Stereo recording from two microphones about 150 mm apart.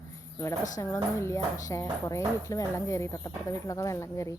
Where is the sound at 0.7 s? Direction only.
20° left (ahead or behind).